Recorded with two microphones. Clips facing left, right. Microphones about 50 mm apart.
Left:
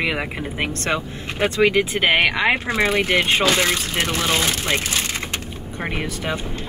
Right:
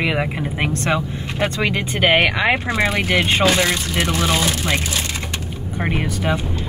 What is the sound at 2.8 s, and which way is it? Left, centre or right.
Speech, right.